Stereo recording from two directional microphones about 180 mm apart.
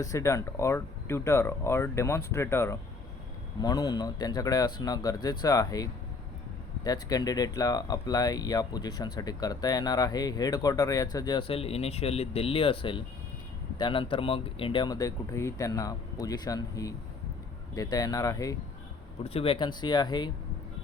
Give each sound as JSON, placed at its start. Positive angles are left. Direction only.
{"t": 0.0, "sound": "speech", "side_deg": 15}
{"t": 19.2, "sound": "speech", "side_deg": 30}